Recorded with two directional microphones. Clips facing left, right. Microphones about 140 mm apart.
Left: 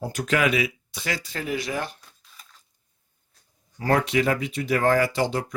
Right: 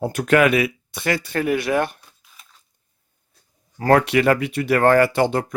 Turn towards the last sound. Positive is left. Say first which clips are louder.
# right 5 dB
turn(degrees=-55)  # may be behind; listen again after turning